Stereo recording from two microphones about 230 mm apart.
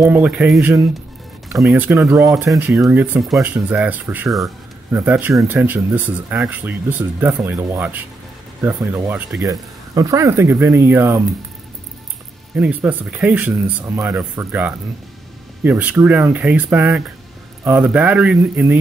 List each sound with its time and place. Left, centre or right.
0.0 s speech: centre
12.5 s speech: centre